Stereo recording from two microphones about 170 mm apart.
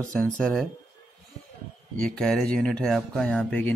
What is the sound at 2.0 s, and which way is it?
Speech, 5° left (ahead or behind).